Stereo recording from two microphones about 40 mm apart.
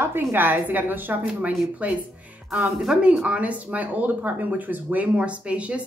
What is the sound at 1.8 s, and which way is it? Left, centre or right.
Speech, right.